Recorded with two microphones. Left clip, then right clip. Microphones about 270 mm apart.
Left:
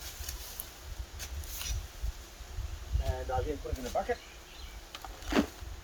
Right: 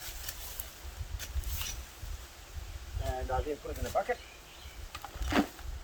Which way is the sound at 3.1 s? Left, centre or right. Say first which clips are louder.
Right 2 dB; centre.